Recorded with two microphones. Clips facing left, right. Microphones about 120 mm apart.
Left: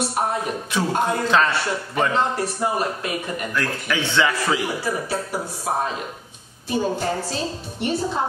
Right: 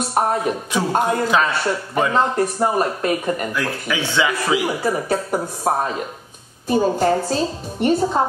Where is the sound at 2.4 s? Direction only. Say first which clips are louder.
Right 5 dB; 45° right (ahead or behind).